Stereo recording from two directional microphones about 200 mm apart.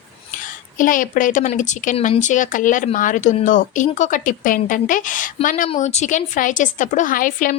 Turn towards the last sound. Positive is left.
turn(degrees=45)  # may be behind; listen again after turning